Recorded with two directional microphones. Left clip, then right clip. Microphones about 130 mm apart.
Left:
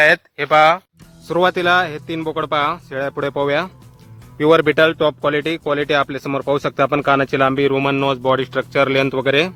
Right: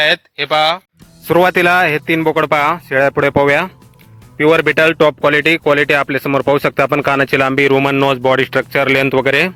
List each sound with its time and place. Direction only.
0.0 s speech: 10° right (ahead or behind)
1.3 s speech: 45° right (ahead or behind)